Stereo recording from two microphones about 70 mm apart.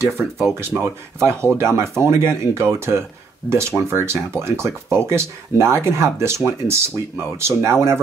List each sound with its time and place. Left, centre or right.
0.6 s speech: right